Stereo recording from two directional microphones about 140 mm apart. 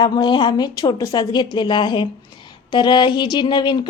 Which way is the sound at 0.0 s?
30° left (ahead or behind).